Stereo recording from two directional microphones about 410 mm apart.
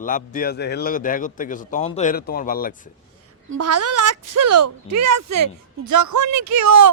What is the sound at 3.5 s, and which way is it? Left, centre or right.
Speech, right.